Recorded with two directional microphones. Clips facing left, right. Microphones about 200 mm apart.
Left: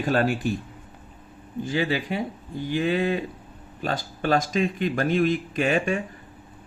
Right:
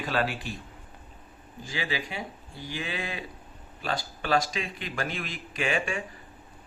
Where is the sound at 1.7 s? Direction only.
50° left (ahead or behind).